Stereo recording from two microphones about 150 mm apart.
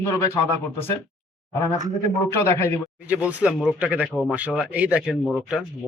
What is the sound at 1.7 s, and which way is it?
Speech, 25° right (ahead or behind).